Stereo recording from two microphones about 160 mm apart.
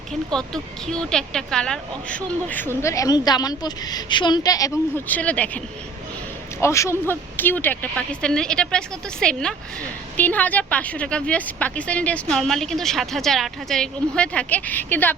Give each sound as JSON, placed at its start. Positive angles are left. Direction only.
{"t": 0.1, "sound": "speech", "side_deg": 5}